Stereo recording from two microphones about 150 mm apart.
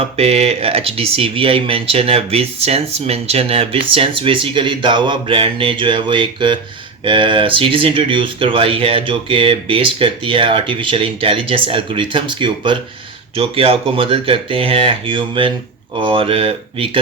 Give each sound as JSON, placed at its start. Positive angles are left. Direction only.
{"t": 0.2, "sound": "speech", "side_deg": -45}